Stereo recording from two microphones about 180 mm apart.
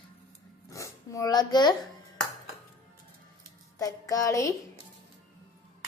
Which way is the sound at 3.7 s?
20° left (ahead or behind).